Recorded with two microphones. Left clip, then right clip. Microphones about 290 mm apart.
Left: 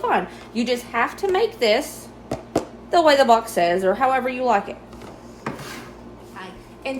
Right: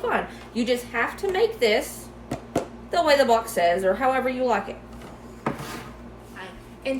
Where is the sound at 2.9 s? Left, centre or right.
Left.